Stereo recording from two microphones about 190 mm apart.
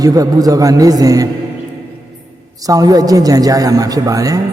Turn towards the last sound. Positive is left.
turn(degrees=-20)  # may be behind; listen again after turning